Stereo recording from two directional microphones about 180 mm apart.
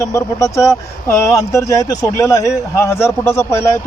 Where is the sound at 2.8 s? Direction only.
15° left (ahead or behind).